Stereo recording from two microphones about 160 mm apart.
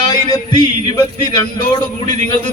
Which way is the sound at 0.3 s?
25° left (ahead or behind).